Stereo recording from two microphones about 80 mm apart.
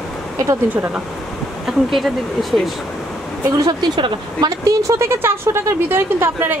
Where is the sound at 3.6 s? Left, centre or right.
Right.